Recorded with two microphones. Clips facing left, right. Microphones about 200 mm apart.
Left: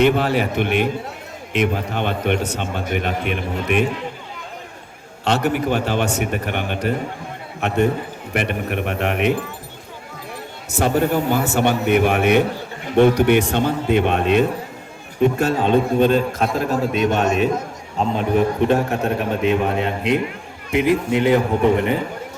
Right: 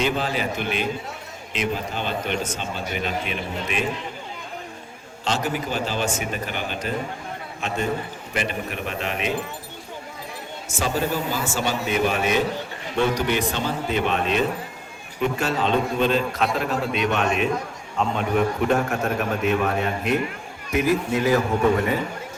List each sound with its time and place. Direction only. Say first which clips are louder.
0.0 s a man's voice: left 7 dB; 60° left (ahead or behind)
5.2 s a man's voice: left 6 dB; 60° left (ahead or behind)
10.7 s a man's voice: left 6 dB; 60° left (ahead or behind); by 21.9 s 25° left (ahead or behind)